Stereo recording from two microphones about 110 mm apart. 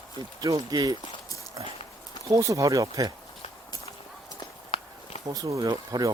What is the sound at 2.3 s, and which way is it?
Speech, 30° right (ahead or behind).